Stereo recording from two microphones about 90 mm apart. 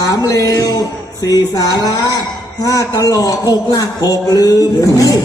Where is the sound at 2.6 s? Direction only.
40° left (ahead or behind).